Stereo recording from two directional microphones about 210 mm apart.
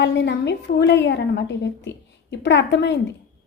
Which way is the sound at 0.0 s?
55° left (ahead or behind).